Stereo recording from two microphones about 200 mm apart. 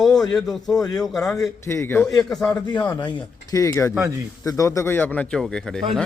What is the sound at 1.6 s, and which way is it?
Speech, 10° left (ahead or behind).